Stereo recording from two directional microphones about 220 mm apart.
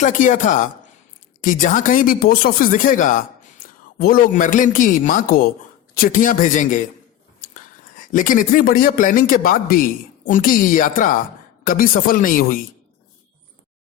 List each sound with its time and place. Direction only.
0.0 s speech: 35° left (ahead or behind)